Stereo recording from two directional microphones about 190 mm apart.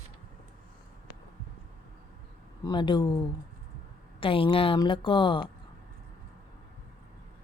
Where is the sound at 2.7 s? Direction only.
25° left (ahead or behind).